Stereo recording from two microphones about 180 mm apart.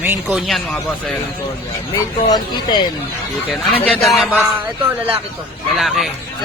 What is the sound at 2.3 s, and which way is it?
Speech, 25° left (ahead or behind).